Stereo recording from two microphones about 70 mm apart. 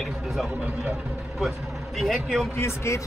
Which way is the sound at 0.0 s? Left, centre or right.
Centre.